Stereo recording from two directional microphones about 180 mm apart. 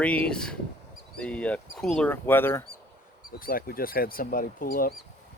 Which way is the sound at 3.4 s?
55° left (ahead or behind).